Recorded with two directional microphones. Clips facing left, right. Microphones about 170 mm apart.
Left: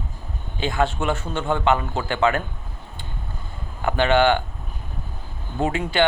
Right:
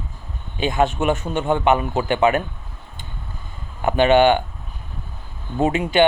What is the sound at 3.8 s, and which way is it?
Speech, 20° right (ahead or behind).